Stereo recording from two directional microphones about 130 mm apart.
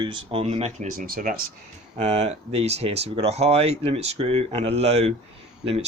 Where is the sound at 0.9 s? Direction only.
90° right.